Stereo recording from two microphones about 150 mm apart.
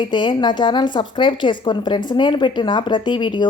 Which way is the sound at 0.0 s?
30° left (ahead or behind).